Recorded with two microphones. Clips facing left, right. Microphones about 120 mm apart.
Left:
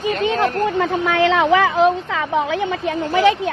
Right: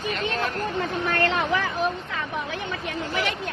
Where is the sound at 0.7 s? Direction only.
90° left.